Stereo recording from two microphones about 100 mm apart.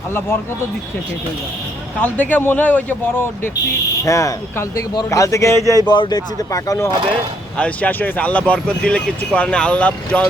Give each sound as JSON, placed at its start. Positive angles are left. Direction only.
{"t": 2.0, "sound": "speech", "side_deg": 15}
{"t": 4.0, "sound": "speech", "side_deg": 30}
{"t": 5.9, "sound": "speech", "side_deg": 45}
{"t": 7.6, "sound": "speech", "side_deg": 15}